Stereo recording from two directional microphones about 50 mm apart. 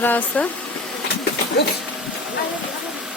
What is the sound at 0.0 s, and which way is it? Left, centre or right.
Speech, left.